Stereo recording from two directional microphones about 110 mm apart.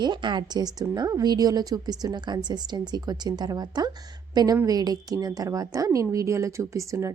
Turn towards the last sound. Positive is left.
turn(degrees=-25)  # may be behind; listen again after turning